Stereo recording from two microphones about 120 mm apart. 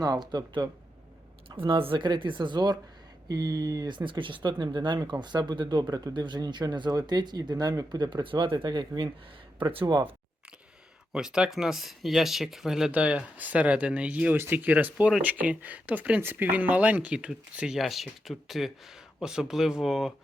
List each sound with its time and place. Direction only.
0.0 s speech: 35° right (ahead or behind)
11.1 s speech: 5° right (ahead or behind)